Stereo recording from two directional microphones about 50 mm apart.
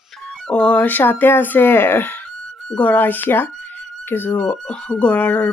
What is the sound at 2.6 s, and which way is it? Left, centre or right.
Speech, left.